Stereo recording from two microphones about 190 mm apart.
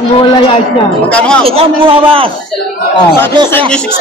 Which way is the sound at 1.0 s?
5° left (ahead or behind).